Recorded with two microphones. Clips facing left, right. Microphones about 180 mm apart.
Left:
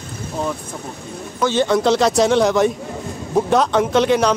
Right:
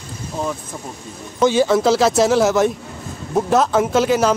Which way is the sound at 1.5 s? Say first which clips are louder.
Even; 5° right (ahead or behind).